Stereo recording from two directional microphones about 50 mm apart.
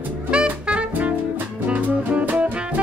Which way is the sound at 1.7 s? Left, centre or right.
Right.